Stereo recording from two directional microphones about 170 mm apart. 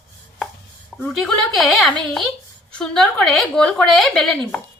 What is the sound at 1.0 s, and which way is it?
A woman's voice, centre (ahead or behind).